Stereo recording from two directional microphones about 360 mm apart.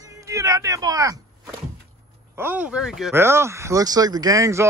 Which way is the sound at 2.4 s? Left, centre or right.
Centre.